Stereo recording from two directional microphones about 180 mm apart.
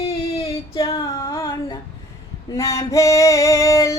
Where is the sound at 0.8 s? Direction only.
20° left (ahead or behind).